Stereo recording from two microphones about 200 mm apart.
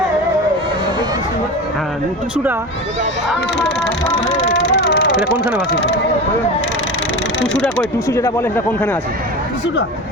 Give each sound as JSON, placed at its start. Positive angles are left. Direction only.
{"t": 4.5, "sound": "speech", "side_deg": 60}
{"t": 7.6, "sound": "speech", "side_deg": 10}